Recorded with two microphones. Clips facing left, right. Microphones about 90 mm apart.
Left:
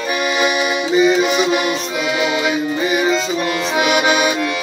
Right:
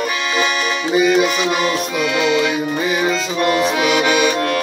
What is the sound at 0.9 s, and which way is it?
Music, centre (ahead or behind).